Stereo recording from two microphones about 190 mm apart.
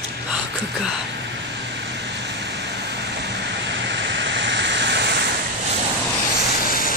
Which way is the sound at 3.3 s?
65° right (ahead or behind).